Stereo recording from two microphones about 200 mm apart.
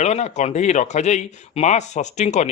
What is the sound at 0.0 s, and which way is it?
Speech, 35° left (ahead or behind).